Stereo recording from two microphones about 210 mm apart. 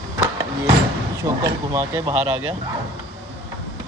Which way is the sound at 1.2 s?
15° right (ahead or behind).